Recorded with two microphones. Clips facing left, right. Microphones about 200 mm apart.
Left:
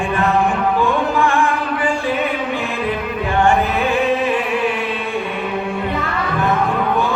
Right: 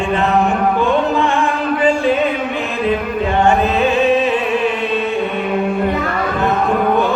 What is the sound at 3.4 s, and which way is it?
Music, 25° right (ahead or behind).